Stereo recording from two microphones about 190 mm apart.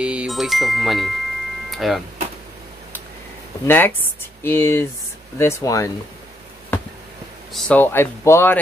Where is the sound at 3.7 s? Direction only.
10° left (ahead or behind).